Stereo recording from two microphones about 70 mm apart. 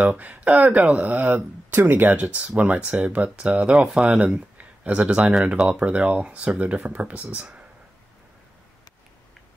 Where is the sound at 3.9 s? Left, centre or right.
Centre.